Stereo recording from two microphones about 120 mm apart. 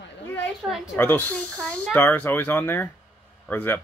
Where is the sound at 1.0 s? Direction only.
15° left (ahead or behind).